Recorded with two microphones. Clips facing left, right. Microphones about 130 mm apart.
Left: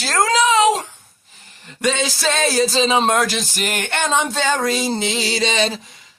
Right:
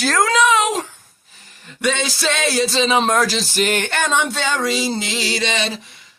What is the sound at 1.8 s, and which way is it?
Music, 45° left (ahead or behind).